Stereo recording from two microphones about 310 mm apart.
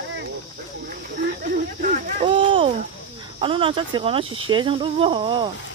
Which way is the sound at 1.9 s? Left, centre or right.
Right.